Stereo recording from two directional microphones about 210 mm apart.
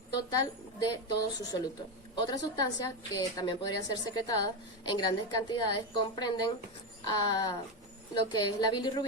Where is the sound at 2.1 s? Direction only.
20° left (ahead or behind).